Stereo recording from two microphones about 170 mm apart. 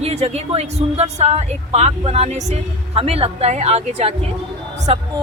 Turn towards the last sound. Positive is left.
turn(degrees=-35)  # may be behind; listen again after turning